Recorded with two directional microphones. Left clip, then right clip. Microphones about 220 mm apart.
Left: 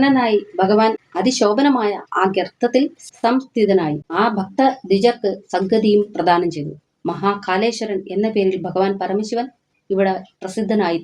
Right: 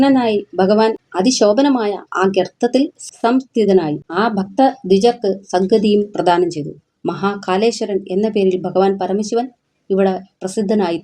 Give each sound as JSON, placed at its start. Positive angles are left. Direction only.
{"t": 0.0, "sound": "a woman's voice", "side_deg": -40}